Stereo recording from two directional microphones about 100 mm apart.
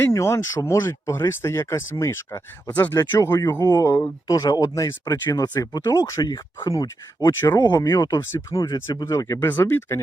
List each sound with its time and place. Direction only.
0.0 s speech: 30° left (ahead or behind)
2.6 s speech: 15° left (ahead or behind)
3.0 s speech: 35° left (ahead or behind)